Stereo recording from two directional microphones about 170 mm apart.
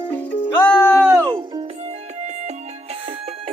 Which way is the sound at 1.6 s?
40° right (ahead or behind).